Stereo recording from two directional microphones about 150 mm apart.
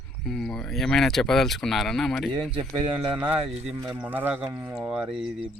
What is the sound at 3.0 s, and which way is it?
Speech, 35° right (ahead or behind).